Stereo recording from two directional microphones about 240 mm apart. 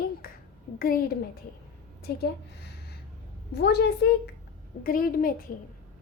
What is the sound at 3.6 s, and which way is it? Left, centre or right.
A woman's voice, left.